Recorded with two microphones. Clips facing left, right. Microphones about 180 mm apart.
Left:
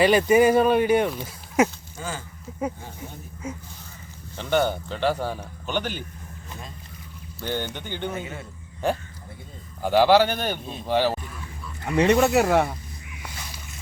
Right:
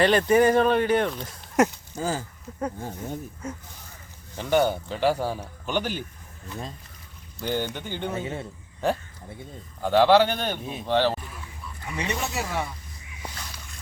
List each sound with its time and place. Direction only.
0.0 s speech: 10° left (ahead or behind)
2.0 s a man's voice: 35° right (ahead or behind)
2.5 s a man's voice: 5° left (ahead or behind)
4.4 s a man's voice: 5° right (ahead or behind)
7.4 s a man's voice: 10° right (ahead or behind)
8.1 s a man's voice: 30° right (ahead or behind)
8.8 s a man's voice: centre (ahead or behind)
11.9 s speech: 60° left (ahead or behind)